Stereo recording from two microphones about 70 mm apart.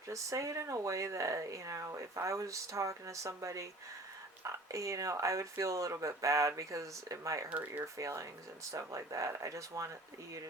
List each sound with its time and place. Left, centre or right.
0.1 s speech: right
7.5 s speech: right
7.9 s speech: right